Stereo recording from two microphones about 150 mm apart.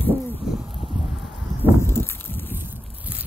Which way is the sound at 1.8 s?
15° left (ahead or behind).